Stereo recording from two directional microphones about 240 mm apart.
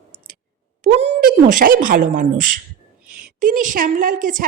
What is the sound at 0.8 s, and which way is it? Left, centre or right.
Speech, right.